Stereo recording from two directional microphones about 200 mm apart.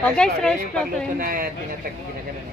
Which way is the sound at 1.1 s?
45° right (ahead or behind).